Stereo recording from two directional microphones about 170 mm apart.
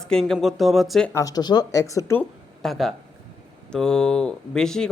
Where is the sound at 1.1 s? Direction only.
20° left (ahead or behind).